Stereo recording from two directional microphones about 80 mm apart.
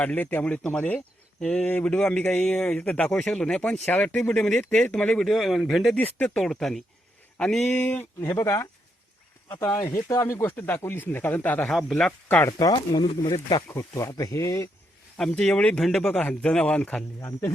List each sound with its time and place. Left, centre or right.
0.0 s speech: left
5.3 s a man's voice: centre
6.0 s speech: centre
6.4 s a man's voice: centre
8.2 s speech: left
10.5 s speech: centre
11.7 s a man's voice: centre
12.5 s speech: left
13.7 s speech: left
15.2 s speech: centre
17.2 s speech: left